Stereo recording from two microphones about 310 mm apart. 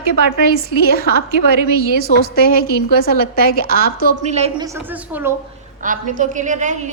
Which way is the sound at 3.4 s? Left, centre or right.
Right.